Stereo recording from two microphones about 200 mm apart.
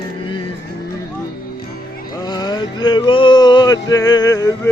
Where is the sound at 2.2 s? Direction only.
20° left (ahead or behind).